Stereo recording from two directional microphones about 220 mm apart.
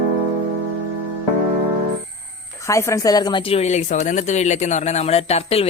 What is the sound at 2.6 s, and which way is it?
Speech, 15° left (ahead or behind).